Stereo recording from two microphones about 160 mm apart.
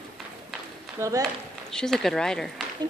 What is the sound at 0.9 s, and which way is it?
Speech, 20° right (ahead or behind).